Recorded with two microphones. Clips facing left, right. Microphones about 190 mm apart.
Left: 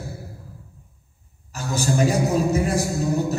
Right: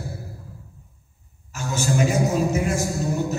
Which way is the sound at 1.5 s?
35° left (ahead or behind).